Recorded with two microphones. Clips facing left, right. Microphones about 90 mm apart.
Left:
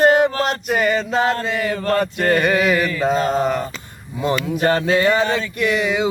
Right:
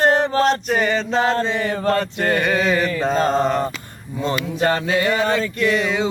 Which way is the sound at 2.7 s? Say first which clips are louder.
Even; 35° right (ahead or behind).